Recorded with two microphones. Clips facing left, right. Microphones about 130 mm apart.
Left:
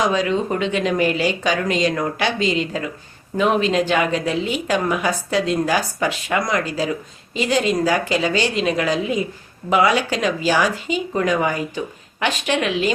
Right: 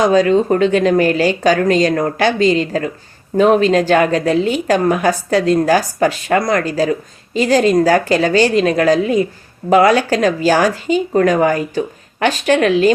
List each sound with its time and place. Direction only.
0.0 s a woman's voice: 40° right (ahead or behind)